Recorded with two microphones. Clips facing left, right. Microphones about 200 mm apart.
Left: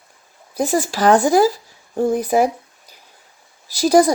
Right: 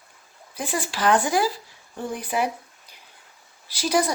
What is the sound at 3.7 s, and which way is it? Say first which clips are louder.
Speech: left 9 dB; 40° left (ahead or behind).